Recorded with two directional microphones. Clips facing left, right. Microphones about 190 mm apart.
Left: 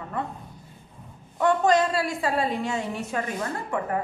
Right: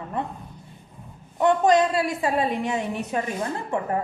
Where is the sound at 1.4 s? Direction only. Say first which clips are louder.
Right 2 dB; 20° right (ahead or behind).